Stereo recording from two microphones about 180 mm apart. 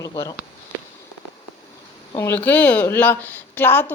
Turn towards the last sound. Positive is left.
turn(degrees=10)  # may be behind; listen again after turning